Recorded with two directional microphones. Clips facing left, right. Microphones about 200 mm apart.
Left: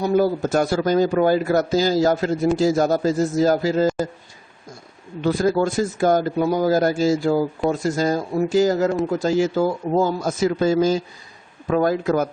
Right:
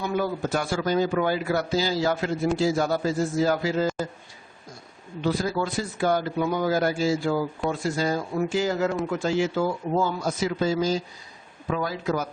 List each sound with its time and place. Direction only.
0.0 s a man's voice: 40° left (ahead or behind)
5.2 s a man's voice: 50° left (ahead or behind)